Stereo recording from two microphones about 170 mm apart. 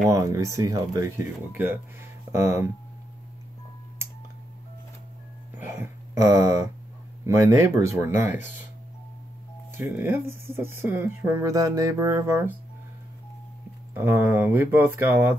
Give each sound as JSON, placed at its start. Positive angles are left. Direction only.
{"t": 0.0, "sound": "speech", "side_deg": -20}
{"t": 5.7, "sound": "speech", "side_deg": -15}
{"t": 9.7, "sound": "speech", "side_deg": -15}
{"t": 13.9, "sound": "speech", "side_deg": -15}